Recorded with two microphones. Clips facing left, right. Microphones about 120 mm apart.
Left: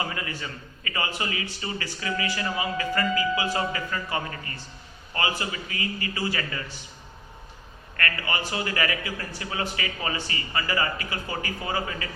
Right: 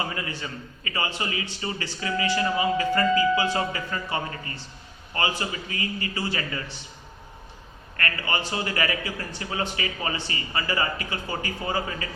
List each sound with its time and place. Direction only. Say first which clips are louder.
0.0 s a man's voice: right 1 dB; 30° right (ahead or behind)
7.9 s a man's voice: right 1 dB; 30° right (ahead or behind)